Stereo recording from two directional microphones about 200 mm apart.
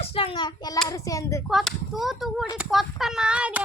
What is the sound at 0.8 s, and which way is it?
Speech, 15° left (ahead or behind).